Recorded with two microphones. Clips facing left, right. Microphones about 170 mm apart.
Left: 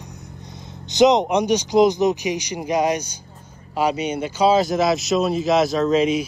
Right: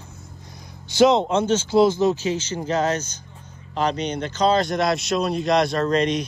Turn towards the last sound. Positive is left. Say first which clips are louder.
# left 3 dB
turn(degrees=5)  # may be behind; listen again after turning